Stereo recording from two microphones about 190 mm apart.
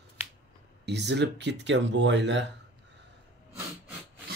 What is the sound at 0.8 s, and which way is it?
Speech, 65° right (ahead or behind).